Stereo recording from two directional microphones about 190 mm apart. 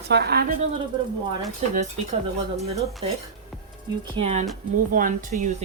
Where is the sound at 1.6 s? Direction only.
35° right (ahead or behind).